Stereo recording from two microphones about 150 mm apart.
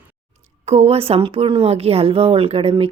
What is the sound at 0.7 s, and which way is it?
A woman's voice, 45° right (ahead or behind).